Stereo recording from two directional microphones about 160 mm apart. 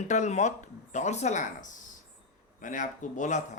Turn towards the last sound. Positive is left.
turn(degrees=50)  # may be behind; listen again after turning